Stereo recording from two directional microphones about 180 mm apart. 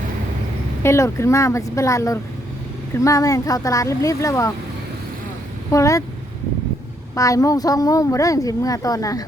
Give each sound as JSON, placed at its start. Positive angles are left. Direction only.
{"t": 0.8, "sound": "speech", "side_deg": 15}
{"t": 5.7, "sound": "speech", "side_deg": 15}
{"t": 7.2, "sound": "a woman's voice", "side_deg": 20}